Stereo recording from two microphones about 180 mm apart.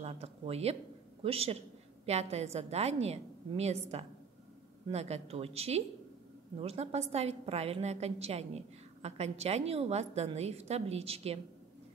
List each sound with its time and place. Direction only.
0.0 s a woman's voice: 35° right (ahead or behind)